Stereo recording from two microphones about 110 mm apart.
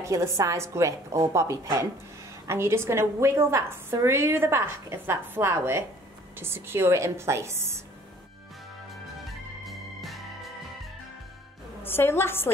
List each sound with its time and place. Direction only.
0.0 s a woman's voice: 25° right (ahead or behind)
9.7 s music: centre (ahead or behind)
11.8 s a woman's voice: 20° left (ahead or behind)